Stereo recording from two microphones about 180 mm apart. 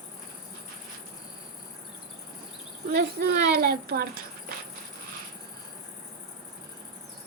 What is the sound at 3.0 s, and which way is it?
A woman's voice, 65° right (ahead or behind).